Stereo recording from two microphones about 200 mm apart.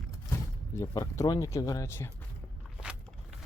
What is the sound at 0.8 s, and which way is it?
Speech, 15° left (ahead or behind).